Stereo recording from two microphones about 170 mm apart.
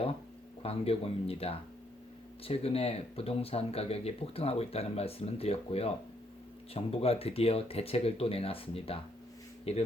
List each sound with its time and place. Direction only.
0.6 s speech: 35° left (ahead or behind)